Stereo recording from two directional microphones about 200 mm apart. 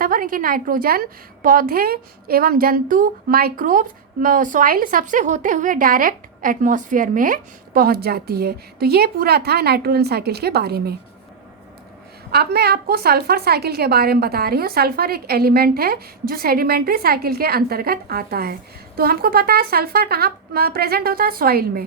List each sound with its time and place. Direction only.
0.0 s a woman's voice: 45° right (ahead or behind)
12.3 s a woman's voice: 55° right (ahead or behind)